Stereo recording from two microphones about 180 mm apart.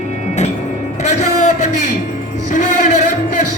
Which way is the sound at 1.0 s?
40° left (ahead or behind).